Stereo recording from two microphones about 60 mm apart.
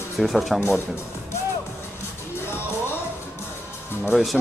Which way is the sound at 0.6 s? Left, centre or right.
Left.